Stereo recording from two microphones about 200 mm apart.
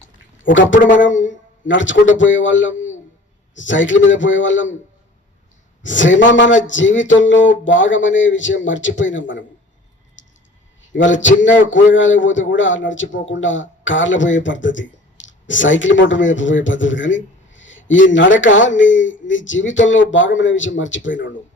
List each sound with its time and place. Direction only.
0.7 s speech: 40° left (ahead or behind)
1.0 s a sound: 70° left (ahead or behind)
2.1 s speech: 70° left (ahead or behind)
5.8 s speech: 70° left (ahead or behind)
10.2 s a sound: 70° left (ahead or behind)
10.9 s speech: 70° left (ahead or behind)